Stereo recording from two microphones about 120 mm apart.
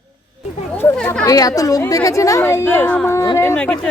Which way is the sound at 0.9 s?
10° left (ahead or behind).